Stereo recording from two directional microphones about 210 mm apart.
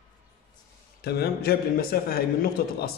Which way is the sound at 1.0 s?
50° left (ahead or behind).